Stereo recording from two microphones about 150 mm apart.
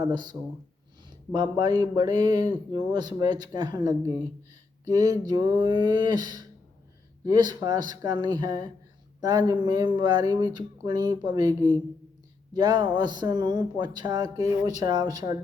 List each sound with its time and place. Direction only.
0.0 s speech: 25° right (ahead or behind)